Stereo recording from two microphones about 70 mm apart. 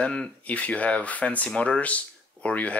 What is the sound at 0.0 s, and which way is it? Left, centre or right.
Speech, centre.